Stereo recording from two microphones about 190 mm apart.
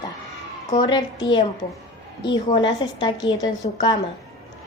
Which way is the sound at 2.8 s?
25° left (ahead or behind).